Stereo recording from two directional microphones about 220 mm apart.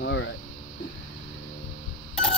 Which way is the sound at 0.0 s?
55° left (ahead or behind).